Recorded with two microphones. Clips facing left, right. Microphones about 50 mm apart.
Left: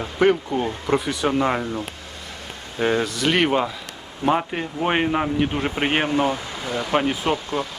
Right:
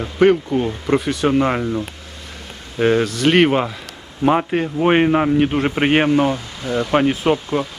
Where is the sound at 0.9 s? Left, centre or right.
Centre.